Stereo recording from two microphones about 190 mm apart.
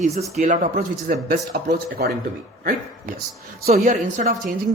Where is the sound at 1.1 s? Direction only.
50° right (ahead or behind).